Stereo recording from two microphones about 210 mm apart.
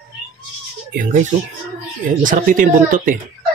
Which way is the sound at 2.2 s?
40° right (ahead or behind).